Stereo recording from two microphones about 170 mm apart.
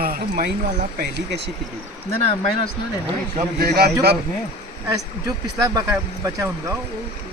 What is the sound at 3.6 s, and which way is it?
Speech, 70° right (ahead or behind).